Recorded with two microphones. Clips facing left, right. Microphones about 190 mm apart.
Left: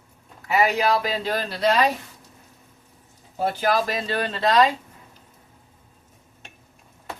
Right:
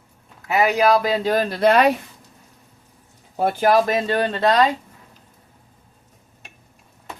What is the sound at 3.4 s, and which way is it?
Speech, 55° right (ahead or behind).